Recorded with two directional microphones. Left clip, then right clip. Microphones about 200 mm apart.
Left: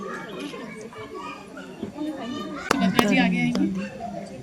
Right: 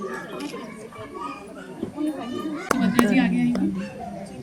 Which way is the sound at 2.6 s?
20° left (ahead or behind).